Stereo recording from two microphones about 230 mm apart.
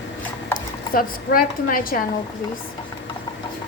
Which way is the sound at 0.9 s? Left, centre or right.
Left.